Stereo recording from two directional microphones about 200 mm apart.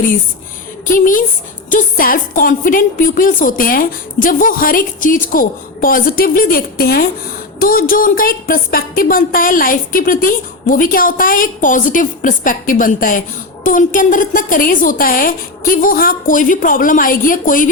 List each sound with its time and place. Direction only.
0.9 s speech: 40° left (ahead or behind)